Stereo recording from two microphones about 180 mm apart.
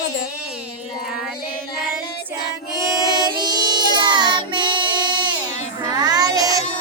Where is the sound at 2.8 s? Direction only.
20° right (ahead or behind).